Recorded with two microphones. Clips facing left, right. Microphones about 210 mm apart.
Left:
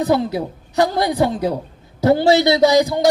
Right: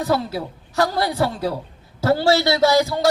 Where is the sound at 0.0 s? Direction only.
20° left (ahead or behind).